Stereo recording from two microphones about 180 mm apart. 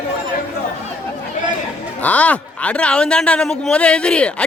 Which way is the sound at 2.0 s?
10° left (ahead or behind).